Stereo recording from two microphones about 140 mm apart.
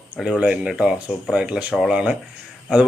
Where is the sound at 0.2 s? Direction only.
5° right (ahead or behind).